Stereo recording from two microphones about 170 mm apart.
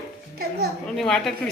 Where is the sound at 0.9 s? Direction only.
5° left (ahead or behind).